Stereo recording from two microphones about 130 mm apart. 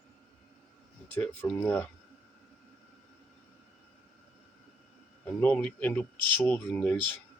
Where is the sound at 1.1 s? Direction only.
15° left (ahead or behind).